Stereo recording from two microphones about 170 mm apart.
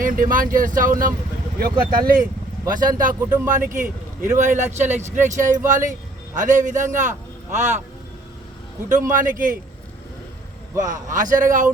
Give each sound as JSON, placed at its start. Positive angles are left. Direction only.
{"t": 0.0, "sound": "speech", "side_deg": -55}
{"t": 8.9, "sound": "speech", "side_deg": -50}
{"t": 10.8, "sound": "speech", "side_deg": -50}